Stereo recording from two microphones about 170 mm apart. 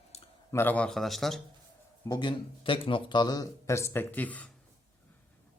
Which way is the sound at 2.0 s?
25° left (ahead or behind).